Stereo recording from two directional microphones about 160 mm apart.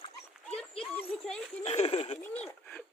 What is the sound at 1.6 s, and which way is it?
Speech, 40° left (ahead or behind).